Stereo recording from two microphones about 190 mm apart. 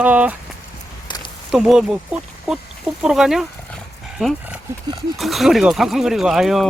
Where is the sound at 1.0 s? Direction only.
25° left (ahead or behind).